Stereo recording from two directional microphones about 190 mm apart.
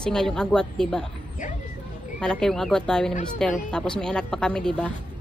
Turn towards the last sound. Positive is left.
turn(degrees=5)  # may be behind; listen again after turning